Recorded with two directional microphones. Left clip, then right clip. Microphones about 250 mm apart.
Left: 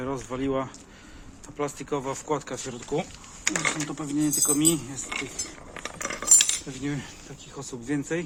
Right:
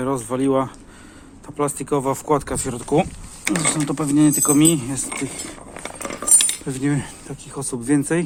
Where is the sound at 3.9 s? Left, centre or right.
Right.